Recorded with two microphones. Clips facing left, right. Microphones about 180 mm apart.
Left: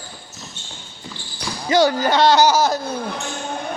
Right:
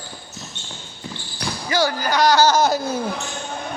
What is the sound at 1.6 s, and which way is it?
Speech, 20° left (ahead or behind).